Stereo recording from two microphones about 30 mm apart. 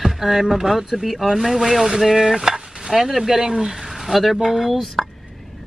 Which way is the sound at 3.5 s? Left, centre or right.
Right.